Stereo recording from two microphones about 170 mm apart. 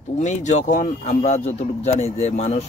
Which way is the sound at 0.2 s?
45° left (ahead or behind).